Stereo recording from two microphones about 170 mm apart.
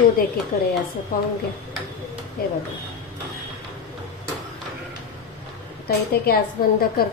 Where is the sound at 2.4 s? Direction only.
60° left (ahead or behind).